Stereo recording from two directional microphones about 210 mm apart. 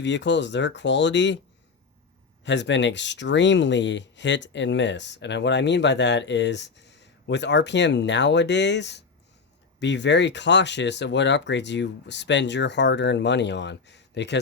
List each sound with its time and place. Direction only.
0.0 s speech: 60° left (ahead or behind)
2.4 s speech: 60° left (ahead or behind)